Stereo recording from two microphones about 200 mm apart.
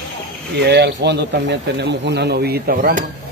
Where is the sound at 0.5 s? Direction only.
55° right (ahead or behind).